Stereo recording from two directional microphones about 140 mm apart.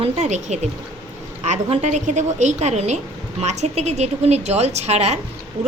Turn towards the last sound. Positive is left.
turn(degrees=-50)  # may be behind; listen again after turning